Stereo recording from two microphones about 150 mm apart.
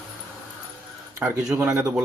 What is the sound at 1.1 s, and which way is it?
Speech, 20° right (ahead or behind).